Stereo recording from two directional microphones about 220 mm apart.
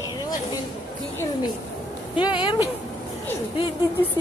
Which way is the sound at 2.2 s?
20° left (ahead or behind).